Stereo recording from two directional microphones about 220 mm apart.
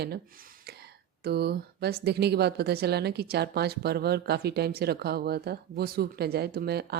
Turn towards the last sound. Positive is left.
turn(degrees=-45)  # may be behind; listen again after turning